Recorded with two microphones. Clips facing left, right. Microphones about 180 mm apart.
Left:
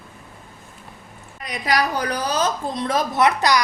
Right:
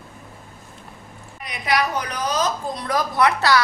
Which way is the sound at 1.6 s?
35° left (ahead or behind).